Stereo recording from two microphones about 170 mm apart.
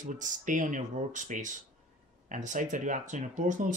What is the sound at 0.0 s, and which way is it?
Speech, 50° right (ahead or behind).